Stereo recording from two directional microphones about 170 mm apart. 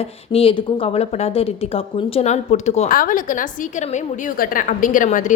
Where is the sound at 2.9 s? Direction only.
55° left (ahead or behind).